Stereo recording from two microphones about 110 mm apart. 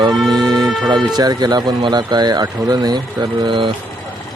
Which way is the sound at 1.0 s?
40° right (ahead or behind).